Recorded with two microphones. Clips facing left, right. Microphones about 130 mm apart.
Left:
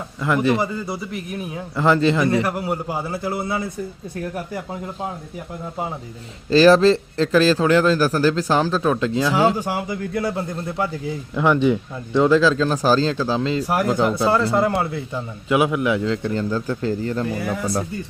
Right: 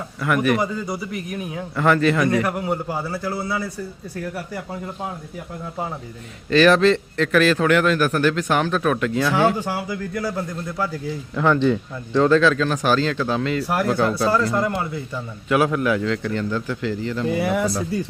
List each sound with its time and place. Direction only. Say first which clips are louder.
0.6 s a man's voice: even; 5° left (ahead or behind)
1.7 s a man's voice: left 1 dB; 25° left (ahead or behind)
2.4 s a man's voice: even; 5° left (ahead or behind)
6.5 s a man's voice: left 2 dB; 30° left (ahead or behind)
9.3 s a man's voice: left 1 dB; 15° left (ahead or behind)
12.4 s a man's voice: left 1 dB; 30° left (ahead or behind)
13.7 s a man's voice: left 1 dB; 15° left (ahead or behind)
14.7 s speech: left 3 dB; 70° left (ahead or behind)
15.1 s a man's voice: even; 20° left (ahead or behind); by 17.2 s 40° left (ahead or behind)
17.4 s speech: right 4 dB; 75° right (ahead or behind)